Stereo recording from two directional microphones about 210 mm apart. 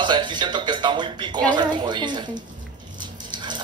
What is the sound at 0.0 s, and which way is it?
Speech, 20° right (ahead or behind).